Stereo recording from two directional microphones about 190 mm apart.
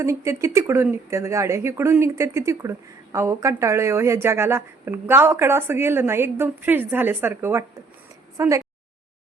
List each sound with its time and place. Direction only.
0.0 s speech: 15° right (ahead or behind)